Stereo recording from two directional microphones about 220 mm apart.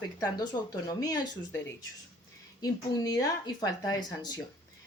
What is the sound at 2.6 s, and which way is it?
Speech, 15° left (ahead or behind).